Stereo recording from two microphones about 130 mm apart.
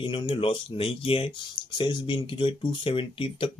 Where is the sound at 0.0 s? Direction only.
40° left (ahead or behind).